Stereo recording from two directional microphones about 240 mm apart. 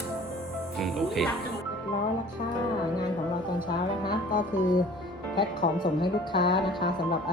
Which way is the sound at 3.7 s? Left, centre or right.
Centre.